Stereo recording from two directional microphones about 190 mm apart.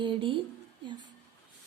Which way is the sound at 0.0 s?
25° right (ahead or behind).